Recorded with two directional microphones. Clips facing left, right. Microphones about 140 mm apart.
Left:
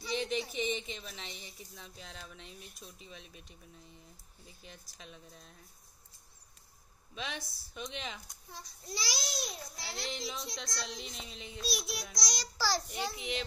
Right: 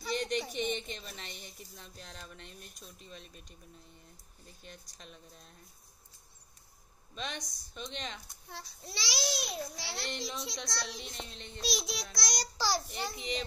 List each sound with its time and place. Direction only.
0.0 s a woman's voice: centre (ahead or behind)
7.2 s a woman's voice: 5° left (ahead or behind)
8.5 s a child's voice: 70° right (ahead or behind)
10.0 s a woman's voice: centre (ahead or behind)
11.6 s a sound: 90° right; by 12.4 s 65° right (ahead or behind)
12.5 s a child's voice: 15° right (ahead or behind)
12.8 s a woman's voice: centre (ahead or behind)